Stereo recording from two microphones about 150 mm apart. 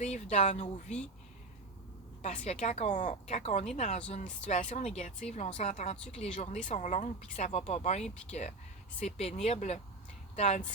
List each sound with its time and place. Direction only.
0.0 s speech: 50° left (ahead or behind)
2.2 s speech: 50° left (ahead or behind)